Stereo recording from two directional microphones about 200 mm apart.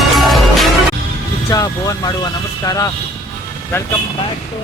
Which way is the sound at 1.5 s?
20° left (ahead or behind).